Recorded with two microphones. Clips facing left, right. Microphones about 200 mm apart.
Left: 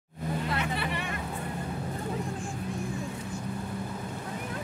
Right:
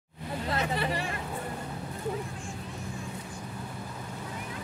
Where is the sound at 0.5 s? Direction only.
35° right (ahead or behind).